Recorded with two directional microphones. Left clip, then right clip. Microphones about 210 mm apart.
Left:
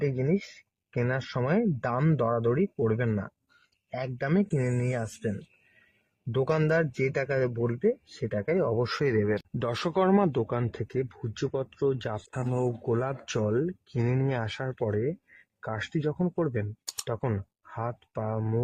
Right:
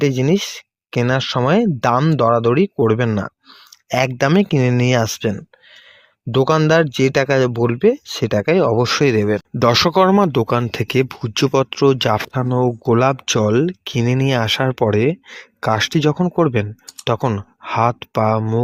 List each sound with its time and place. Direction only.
0.0 s speech: 45° right (ahead or behind)
6.3 s speech: 40° right (ahead or behind)
17.1 s speech: 30° right (ahead or behind)
17.7 s speech: 45° right (ahead or behind)